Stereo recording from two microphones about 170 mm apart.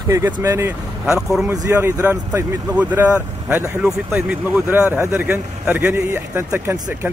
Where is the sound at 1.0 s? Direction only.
5° right (ahead or behind).